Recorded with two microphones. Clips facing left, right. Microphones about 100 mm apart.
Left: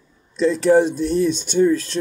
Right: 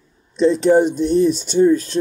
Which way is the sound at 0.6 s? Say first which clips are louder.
Left 2 dB; 15° right (ahead or behind).